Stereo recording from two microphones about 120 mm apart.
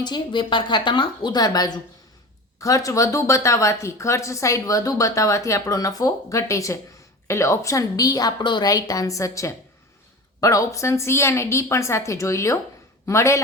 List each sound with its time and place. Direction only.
0.0 s a woman's voice: 40° left (ahead or behind); by 13.4 s 25° left (ahead or behind)